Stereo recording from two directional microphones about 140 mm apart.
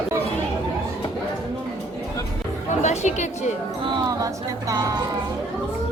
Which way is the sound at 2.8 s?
55° left (ahead or behind).